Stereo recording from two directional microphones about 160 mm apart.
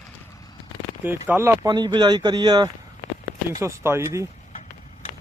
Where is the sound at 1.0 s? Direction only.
15° right (ahead or behind).